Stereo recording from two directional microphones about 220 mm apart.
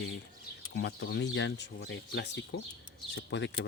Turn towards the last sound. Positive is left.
turn(degrees=55)  # may be behind; listen again after turning